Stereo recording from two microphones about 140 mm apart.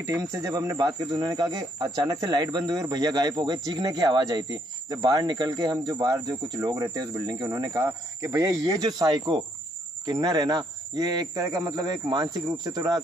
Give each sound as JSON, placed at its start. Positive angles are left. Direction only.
{"t": 0.0, "sound": "speech", "side_deg": -20}